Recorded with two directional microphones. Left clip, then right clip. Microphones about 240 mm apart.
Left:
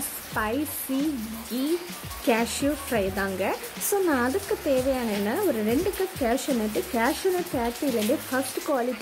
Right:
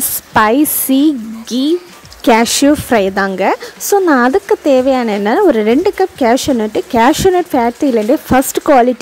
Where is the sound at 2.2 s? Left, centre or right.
Right.